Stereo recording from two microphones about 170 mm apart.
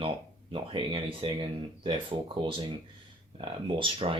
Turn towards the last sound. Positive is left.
turn(degrees=-30)  # may be behind; listen again after turning